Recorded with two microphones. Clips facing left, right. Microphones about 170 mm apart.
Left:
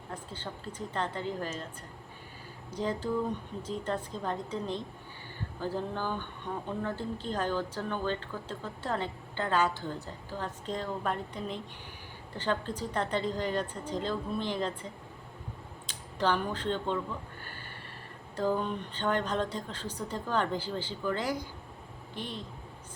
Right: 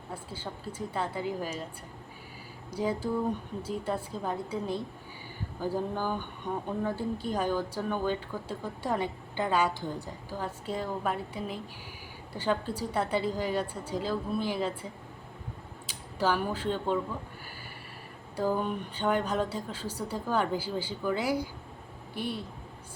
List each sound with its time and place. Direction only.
0.1 s a woman's voice: 10° right (ahead or behind)
2.6 s a woman's voice: 10° right (ahead or behind)
15.9 s speech: 5° right (ahead or behind)
18.3 s a woman's voice: 10° right (ahead or behind)